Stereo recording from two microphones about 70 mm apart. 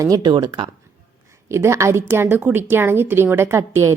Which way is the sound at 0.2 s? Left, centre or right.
Right.